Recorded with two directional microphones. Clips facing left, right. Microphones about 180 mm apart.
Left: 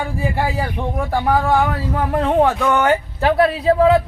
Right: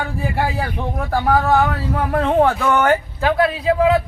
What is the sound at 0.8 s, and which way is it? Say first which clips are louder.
Speech: even; 10° left (ahead or behind).